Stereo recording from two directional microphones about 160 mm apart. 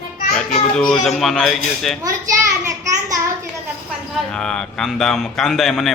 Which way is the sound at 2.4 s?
20° right (ahead or behind).